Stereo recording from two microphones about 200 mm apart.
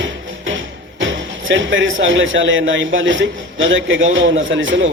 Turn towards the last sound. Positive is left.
turn(degrees=-70)  # may be behind; listen again after turning